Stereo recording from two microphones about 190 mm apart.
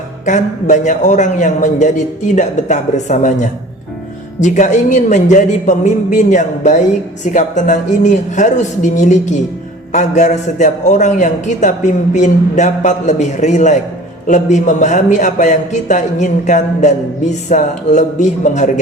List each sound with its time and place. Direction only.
0.3 s a man's voice: 40° left (ahead or behind)